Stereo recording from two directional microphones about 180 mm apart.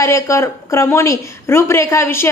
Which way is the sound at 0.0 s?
15° left (ahead or behind).